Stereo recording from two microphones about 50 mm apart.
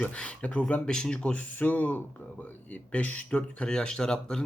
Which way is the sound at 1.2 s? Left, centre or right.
Left.